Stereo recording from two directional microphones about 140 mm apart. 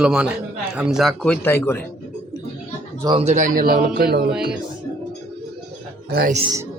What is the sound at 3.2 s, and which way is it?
Speech, 55° right (ahead or behind).